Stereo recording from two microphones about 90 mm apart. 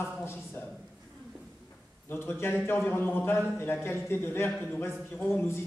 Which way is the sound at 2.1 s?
25° left (ahead or behind).